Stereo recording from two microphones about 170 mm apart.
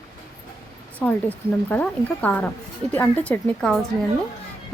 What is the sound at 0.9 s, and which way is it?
A woman's voice, 10° left (ahead or behind).